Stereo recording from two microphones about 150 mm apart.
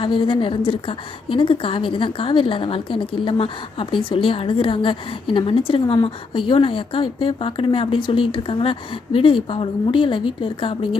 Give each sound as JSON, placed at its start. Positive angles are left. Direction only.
{"t": 0.0, "sound": "a woman's voice", "side_deg": 35}